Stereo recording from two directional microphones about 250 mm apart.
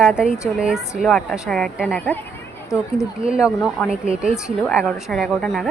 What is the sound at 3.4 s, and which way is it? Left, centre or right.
A woman's voice, centre.